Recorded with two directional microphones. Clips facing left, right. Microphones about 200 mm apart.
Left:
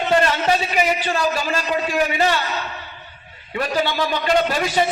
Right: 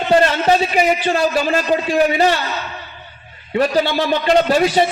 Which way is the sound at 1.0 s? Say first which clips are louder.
Right 5 dB; 40° right (ahead or behind).